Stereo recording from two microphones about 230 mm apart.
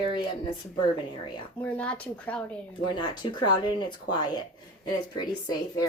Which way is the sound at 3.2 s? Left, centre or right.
Centre.